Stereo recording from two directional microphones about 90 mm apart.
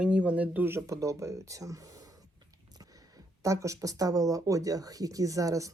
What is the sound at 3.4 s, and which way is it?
Speech, 35° right (ahead or behind).